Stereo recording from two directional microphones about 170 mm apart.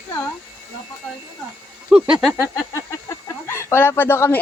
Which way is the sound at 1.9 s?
5° right (ahead or behind).